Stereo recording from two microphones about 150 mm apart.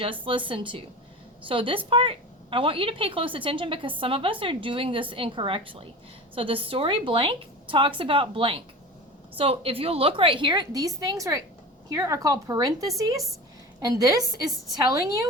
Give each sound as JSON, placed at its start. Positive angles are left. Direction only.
{"t": 0.0, "sound": "a woman's voice", "side_deg": -35}